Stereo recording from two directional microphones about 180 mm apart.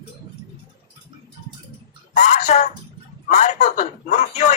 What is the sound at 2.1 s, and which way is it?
A man's voice, 40° left (ahead or behind).